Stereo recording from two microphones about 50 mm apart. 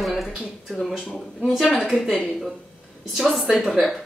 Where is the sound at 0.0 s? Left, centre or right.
Centre.